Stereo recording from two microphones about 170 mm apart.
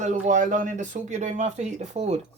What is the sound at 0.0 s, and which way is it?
Speech, 45° right (ahead or behind).